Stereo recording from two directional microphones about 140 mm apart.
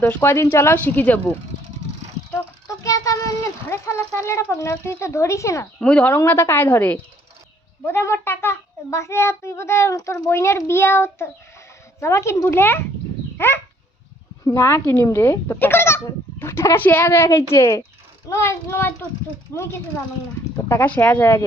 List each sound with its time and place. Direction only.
0.0 s speech: 15° left (ahead or behind)
2.3 s a sound: 25° left (ahead or behind)
5.8 s a child's voice: 10° left (ahead or behind)
13.3 s dog: 15° left (ahead or behind)
14.4 s a child's voice: 20° left (ahead or behind)